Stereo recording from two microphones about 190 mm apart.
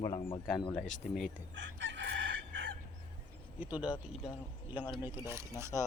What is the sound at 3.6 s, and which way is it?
Speech, 5° right (ahead or behind).